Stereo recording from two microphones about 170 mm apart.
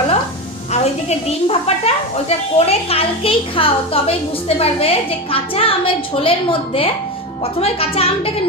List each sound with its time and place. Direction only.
1.3 s a woman's voice: 35° left (ahead or behind)